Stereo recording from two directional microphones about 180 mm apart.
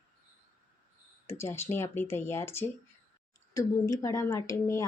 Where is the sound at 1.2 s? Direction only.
15° left (ahead or behind).